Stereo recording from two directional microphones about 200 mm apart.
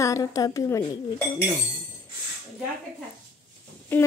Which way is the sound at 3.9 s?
5° left (ahead or behind).